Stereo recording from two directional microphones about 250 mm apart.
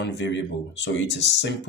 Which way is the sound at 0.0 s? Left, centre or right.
Left.